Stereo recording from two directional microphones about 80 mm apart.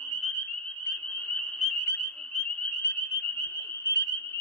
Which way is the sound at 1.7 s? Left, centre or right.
Left.